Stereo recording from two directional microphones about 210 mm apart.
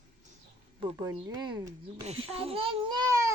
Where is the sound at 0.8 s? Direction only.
20° right (ahead or behind).